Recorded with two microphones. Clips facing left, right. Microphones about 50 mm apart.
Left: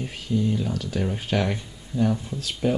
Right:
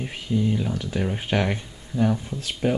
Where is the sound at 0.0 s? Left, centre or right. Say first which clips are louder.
Right 1 dB; right.